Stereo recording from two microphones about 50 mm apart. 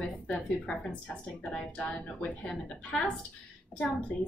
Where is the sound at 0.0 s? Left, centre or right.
Left.